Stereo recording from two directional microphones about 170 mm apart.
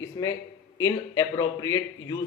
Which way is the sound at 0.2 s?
25° left (ahead or behind).